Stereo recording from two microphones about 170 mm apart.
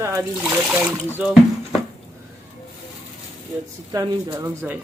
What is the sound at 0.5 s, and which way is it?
Speech, 5° right (ahead or behind).